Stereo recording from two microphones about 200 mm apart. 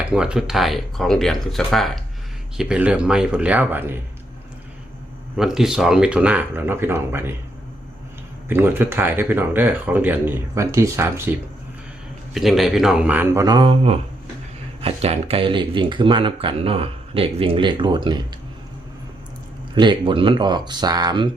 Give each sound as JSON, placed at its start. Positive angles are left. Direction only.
{"t": 0.0, "sound": "speech", "side_deg": -5}
{"t": 5.4, "sound": "speech", "side_deg": -5}
{"t": 8.4, "sound": "speech", "side_deg": -10}
{"t": 12.3, "sound": "speech", "side_deg": 0}
{"t": 19.7, "sound": "speech", "side_deg": -25}